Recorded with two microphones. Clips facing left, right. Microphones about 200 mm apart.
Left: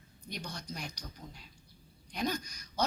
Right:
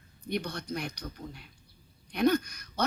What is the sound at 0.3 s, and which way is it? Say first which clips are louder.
A woman's voice: right 9 dB; 60° right (ahead or behind).